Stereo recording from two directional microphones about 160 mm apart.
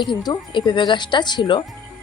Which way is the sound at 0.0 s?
25° left (ahead or behind).